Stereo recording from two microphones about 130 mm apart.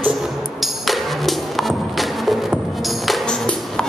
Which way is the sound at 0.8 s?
Centre (ahead or behind).